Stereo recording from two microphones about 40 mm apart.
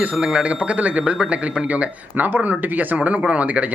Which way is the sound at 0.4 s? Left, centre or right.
Right.